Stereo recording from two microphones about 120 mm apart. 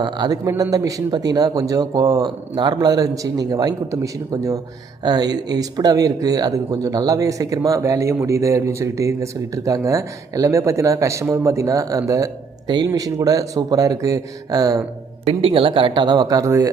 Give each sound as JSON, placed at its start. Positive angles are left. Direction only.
{"t": 0.0, "sound": "speech", "side_deg": -40}
{"t": 15.2, "sound": "speech", "side_deg": -55}